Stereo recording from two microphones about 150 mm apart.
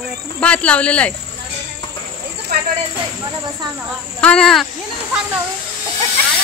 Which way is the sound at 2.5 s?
90° right.